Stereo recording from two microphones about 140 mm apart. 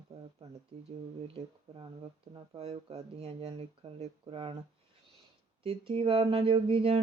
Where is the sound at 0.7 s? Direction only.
50° right (ahead or behind).